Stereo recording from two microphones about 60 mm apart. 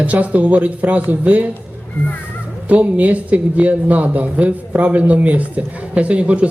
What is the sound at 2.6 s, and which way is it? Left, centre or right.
Speech, right.